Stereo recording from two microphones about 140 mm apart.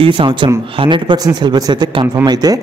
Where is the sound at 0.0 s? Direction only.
35° right (ahead or behind).